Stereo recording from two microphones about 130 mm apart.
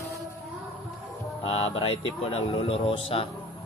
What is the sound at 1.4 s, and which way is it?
Speech, 50° left (ahead or behind).